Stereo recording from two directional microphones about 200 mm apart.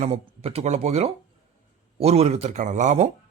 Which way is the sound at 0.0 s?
30° right (ahead or behind).